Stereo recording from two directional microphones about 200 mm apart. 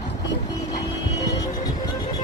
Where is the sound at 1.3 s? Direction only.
20° left (ahead or behind).